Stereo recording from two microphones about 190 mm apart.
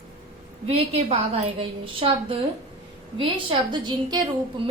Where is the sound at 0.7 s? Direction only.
30° right (ahead or behind).